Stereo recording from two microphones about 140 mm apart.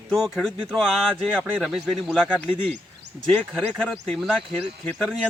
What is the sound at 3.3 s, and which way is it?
Speech, 5° right (ahead or behind).